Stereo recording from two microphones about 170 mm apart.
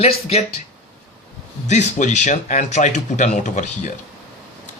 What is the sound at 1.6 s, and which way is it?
Speech, 45° left (ahead or behind).